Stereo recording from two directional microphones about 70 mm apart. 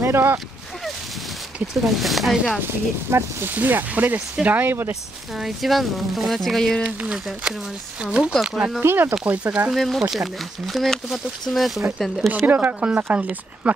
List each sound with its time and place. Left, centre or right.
0.0 s speech: right
1.7 s speech: centre
2.6 s speech: right
5.3 s speech: centre
6.8 s speech: centre
8.8 s speech: right
9.2 s speech: centre
9.8 s speech: centre
12.3 s speech: right